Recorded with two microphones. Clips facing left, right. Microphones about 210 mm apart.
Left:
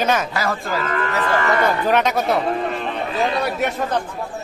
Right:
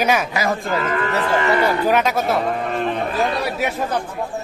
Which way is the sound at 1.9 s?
Centre (ahead or behind).